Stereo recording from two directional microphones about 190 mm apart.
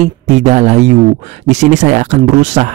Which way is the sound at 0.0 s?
35° right (ahead or behind).